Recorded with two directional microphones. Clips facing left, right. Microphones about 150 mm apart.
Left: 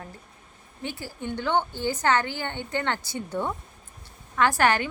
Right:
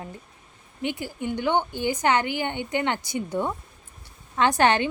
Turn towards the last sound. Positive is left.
turn(degrees=-20)  # may be behind; listen again after turning